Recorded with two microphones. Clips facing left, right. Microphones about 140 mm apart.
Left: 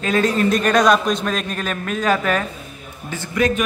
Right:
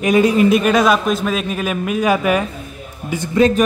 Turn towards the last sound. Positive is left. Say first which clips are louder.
# right 6 dB
turn(degrees=-30)  # may be behind; listen again after turning